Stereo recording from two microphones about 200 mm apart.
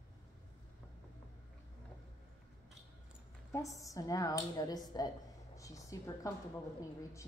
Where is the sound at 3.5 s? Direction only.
15° left (ahead or behind).